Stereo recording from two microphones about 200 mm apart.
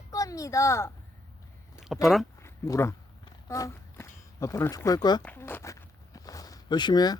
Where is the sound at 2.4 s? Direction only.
15° left (ahead or behind).